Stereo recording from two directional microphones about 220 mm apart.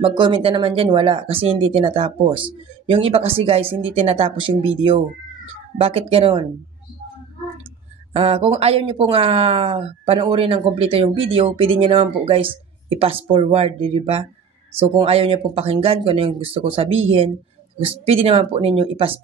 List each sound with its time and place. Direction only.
0.0 s speech: 20° right (ahead or behind)
8.1 s speech: 25° right (ahead or behind)